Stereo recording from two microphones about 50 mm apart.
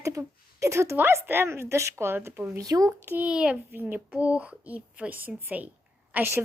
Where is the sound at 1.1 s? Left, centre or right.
Right.